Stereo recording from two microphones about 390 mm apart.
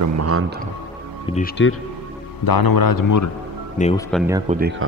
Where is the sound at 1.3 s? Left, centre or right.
Left.